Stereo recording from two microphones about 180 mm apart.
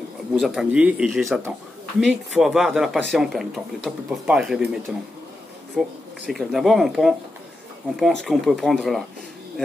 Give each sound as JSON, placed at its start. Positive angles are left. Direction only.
{"t": 0.4, "sound": "speech", "side_deg": -5}
{"t": 5.8, "sound": "speech", "side_deg": 0}